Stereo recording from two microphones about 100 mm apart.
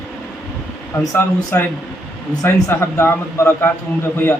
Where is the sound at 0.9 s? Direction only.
25° left (ahead or behind).